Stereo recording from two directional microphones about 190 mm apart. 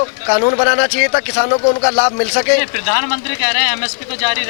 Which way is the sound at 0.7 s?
15° left (ahead or behind).